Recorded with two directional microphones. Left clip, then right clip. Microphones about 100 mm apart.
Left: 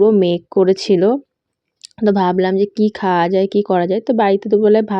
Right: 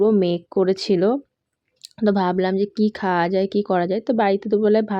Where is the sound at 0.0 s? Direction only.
35° left (ahead or behind).